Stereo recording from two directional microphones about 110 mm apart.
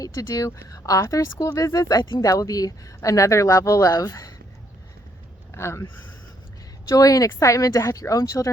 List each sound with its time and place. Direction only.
0.0 s speech: 30° left (ahead or behind)
5.5 s speech: 25° left (ahead or behind)